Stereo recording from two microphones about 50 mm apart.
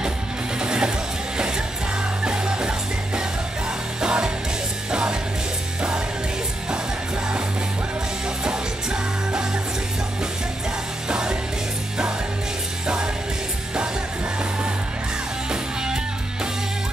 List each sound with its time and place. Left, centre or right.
0.6 s music: centre
2.2 s music: centre
4.0 s music: centre
5.8 s music: centre
11.1 s music: centre
12.8 s music: centre
15.5 s music: centre